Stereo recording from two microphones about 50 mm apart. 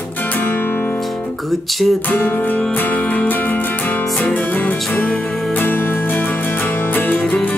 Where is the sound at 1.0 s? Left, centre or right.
Centre.